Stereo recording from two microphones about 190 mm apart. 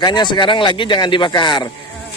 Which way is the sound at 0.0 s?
25° left (ahead or behind).